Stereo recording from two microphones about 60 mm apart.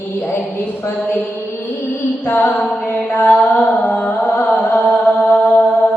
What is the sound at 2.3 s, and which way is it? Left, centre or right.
Music, left.